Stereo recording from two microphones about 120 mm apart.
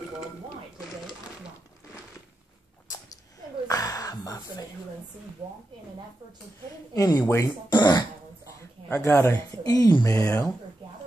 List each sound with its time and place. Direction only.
3.6 s a sound: 30° left (ahead or behind)
6.9 s speech: 25° left (ahead or behind)
7.7 s speech: 35° left (ahead or behind)
9.0 s speech: 20° left (ahead or behind)